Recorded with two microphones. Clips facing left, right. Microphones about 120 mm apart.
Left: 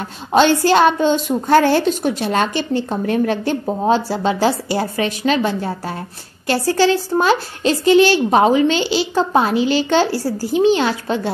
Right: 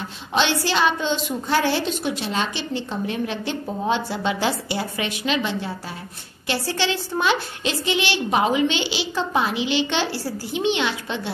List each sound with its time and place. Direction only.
0.3 s a woman's voice: 45° left (ahead or behind)